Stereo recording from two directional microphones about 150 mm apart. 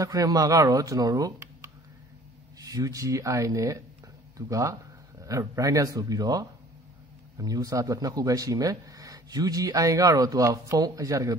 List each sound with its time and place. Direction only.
0.0 s speech: 25° right (ahead or behind)